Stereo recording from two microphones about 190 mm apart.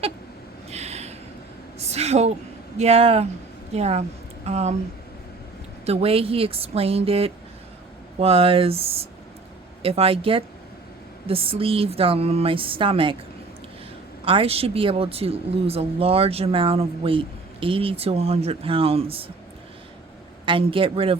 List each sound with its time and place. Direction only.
0.7 s a sound: 35° right (ahead or behind)
1.8 s a woman's voice: 35° right (ahead or behind)
5.8 s a woman's voice: 30° right (ahead or behind)
14.3 s speech: 30° right (ahead or behind)
20.4 s a woman's voice: 25° right (ahead or behind)